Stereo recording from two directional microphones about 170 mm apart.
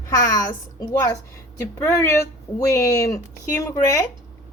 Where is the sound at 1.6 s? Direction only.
15° left (ahead or behind).